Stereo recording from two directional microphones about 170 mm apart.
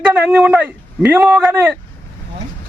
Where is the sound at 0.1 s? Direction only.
10° right (ahead or behind).